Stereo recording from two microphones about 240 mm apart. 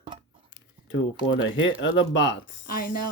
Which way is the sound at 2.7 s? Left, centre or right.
Left.